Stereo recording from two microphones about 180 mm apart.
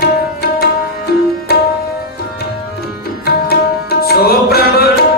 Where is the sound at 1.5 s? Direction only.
60° left (ahead or behind).